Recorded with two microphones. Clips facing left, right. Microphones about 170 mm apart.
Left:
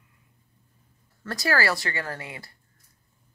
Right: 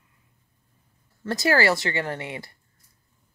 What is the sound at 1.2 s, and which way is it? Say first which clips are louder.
Speech: right 4 dB; 25° right (ahead or behind).